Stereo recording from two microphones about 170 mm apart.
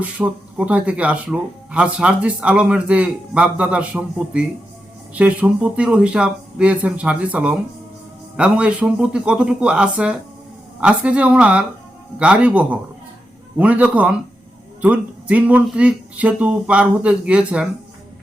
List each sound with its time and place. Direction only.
0.0 s speech: 10° right (ahead or behind)